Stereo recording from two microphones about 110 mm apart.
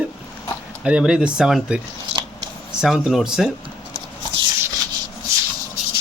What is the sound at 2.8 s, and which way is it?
Speech, centre (ahead or behind).